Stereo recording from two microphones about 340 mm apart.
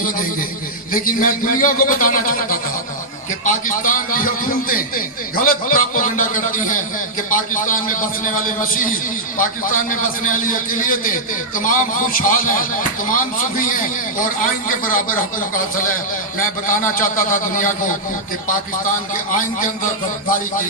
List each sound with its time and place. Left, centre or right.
1.0 s a man's voice: left
16.6 s a man's voice: left
19.4 s a man's voice: left